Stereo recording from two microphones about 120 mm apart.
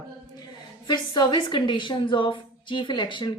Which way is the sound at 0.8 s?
35° left (ahead or behind).